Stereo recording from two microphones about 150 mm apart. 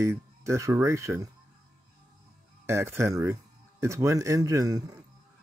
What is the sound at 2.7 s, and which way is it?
Speech, 15° right (ahead or behind).